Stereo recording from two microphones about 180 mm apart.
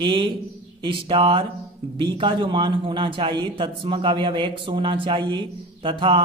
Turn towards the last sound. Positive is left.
turn(degrees=-30)  # may be behind; listen again after turning